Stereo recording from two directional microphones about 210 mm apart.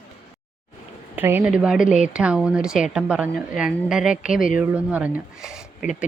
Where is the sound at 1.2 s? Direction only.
10° right (ahead or behind).